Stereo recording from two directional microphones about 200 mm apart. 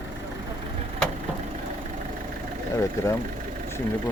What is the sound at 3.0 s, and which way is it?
Speech, 15° left (ahead or behind).